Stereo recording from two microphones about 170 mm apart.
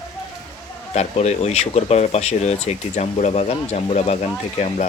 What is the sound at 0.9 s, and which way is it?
Speech, 40° left (ahead or behind).